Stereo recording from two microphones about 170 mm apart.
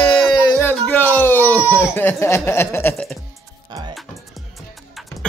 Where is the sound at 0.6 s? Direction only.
10° left (ahead or behind).